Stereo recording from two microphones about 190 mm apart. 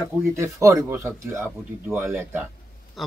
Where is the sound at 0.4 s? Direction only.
15° right (ahead or behind).